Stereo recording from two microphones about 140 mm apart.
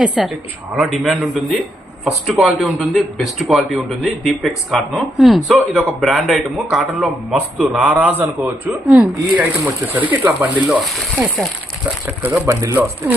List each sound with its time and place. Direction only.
0.0 s speech: 5° right (ahead or behind)
12.0 s speech: 10° right (ahead or behind)